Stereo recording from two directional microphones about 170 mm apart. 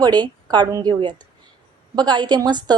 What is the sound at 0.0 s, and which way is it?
A woman's voice, 25° right (ahead or behind).